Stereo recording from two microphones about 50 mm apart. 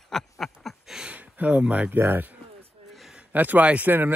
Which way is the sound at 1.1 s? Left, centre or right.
Right.